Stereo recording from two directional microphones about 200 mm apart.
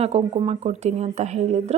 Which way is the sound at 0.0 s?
30° right (ahead or behind).